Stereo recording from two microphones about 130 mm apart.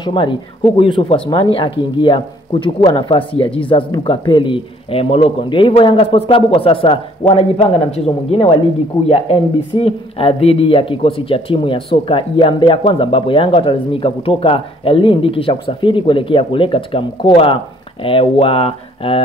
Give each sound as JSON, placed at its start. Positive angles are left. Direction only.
{"t": 0.0, "sound": "speech", "side_deg": 40}